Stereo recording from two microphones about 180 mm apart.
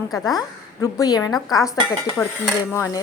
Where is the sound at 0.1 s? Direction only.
20° left (ahead or behind).